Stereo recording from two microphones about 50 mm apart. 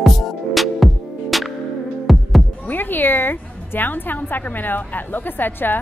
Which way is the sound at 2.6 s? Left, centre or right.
Left.